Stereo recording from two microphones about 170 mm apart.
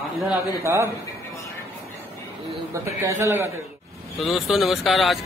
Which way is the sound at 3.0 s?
15° right (ahead or behind).